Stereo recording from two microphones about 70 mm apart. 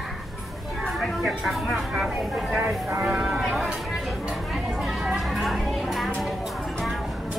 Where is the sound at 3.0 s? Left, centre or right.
Centre.